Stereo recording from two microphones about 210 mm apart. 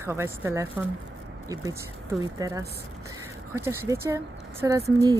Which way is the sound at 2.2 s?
15° right (ahead or behind).